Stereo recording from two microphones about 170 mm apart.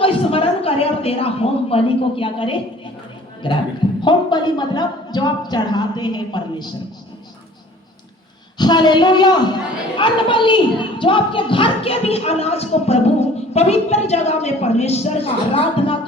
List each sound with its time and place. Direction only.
0.0 s a woman's voice: 35° left (ahead or behind)
4.0 s speech: 25° left (ahead or behind)
8.5 s a woman's voice: 25° left (ahead or behind)